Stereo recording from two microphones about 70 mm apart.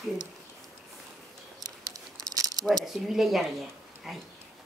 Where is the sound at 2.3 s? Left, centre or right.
Right.